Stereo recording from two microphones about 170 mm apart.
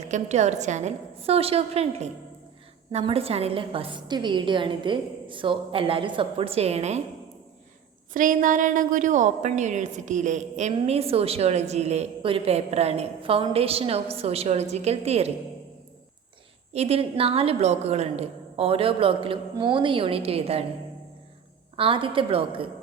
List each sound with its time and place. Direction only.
0.0 s a woman's voice: 40° right (ahead or behind)
8.1 s a woman's voice: 50° right (ahead or behind)
16.7 s a woman's voice: 35° right (ahead or behind)
21.8 s a woman's voice: 30° right (ahead or behind)